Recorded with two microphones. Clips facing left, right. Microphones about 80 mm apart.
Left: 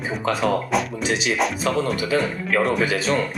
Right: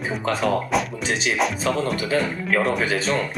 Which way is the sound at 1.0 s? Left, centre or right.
Right.